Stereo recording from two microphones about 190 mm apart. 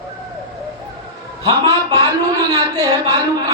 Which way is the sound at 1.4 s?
20° right (ahead or behind).